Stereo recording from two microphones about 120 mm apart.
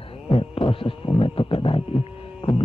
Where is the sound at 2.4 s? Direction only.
50° left (ahead or behind).